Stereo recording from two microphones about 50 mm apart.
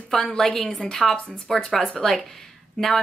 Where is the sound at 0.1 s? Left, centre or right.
Centre.